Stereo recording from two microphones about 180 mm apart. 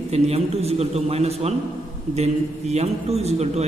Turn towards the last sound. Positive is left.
turn(degrees=-35)  # may be behind; listen again after turning